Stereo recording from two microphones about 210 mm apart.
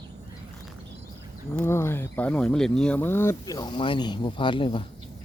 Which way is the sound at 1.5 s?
10° left (ahead or behind).